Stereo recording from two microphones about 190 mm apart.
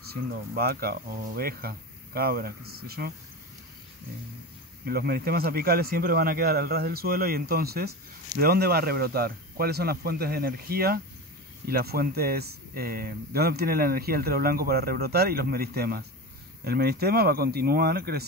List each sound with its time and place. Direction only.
0.1 s speech: 55° right (ahead or behind)
4.8 s speech: 55° right (ahead or behind)